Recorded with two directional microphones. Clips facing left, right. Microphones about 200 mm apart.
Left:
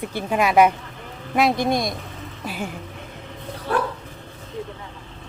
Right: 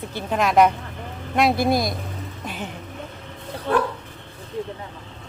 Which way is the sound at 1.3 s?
5° right (ahead or behind).